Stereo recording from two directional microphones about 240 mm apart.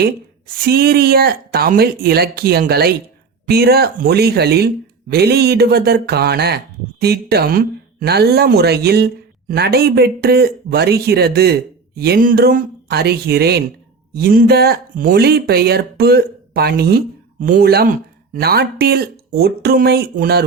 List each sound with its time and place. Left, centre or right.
0.0 s a man's voice: right